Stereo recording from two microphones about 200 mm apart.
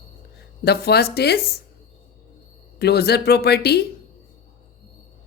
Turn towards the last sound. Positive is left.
turn(degrees=55)  # may be behind; listen again after turning